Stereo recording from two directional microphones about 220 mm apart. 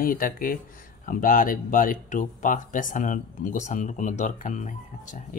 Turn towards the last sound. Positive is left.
turn(degrees=35)  # may be behind; listen again after turning